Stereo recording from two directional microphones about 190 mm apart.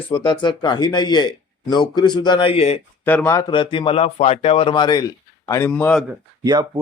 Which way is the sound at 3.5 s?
25° left (ahead or behind).